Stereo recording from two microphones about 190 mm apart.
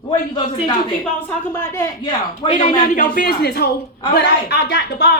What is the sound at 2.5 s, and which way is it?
Speech, 40° left (ahead or behind).